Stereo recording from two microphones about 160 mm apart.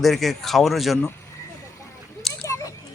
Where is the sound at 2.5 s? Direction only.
20° left (ahead or behind).